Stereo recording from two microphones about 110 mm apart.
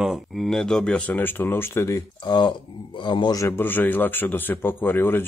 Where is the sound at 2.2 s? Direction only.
45° left (ahead or behind).